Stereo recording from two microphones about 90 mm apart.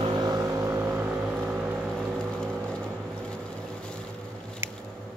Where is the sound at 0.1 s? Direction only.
50° right (ahead or behind).